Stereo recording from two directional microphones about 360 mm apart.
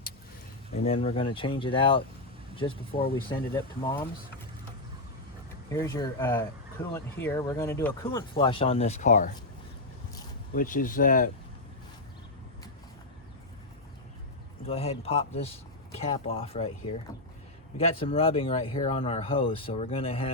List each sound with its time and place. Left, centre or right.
0.8 s speech: centre
5.7 s speech: centre
10.5 s speech: left
14.7 s speech: centre
17.7 s speech: centre